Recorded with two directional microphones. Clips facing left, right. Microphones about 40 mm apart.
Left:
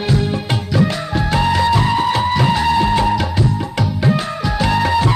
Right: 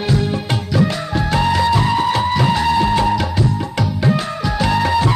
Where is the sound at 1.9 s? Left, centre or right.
Left.